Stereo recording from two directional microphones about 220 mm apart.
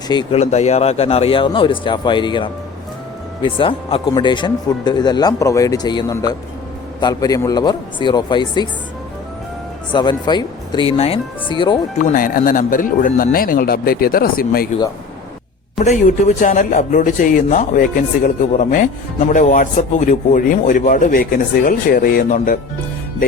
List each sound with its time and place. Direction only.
0.1 s speech: 25° left (ahead or behind)
9.9 s speech: 20° left (ahead or behind)
12.0 s speech: 40° left (ahead or behind)
15.8 s speech: 30° left (ahead or behind)